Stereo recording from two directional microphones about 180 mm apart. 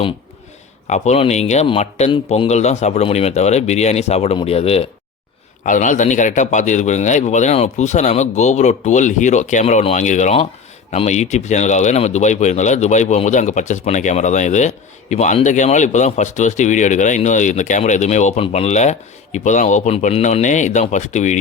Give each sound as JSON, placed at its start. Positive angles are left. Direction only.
{"t": 0.9, "sound": "speech", "side_deg": 40}
{"t": 5.6, "sound": "speech", "side_deg": 45}